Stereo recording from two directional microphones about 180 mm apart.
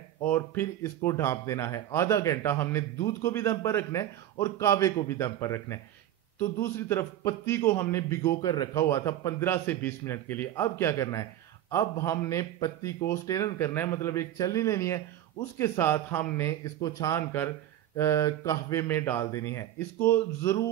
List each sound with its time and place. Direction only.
0.2 s speech: 10° left (ahead or behind)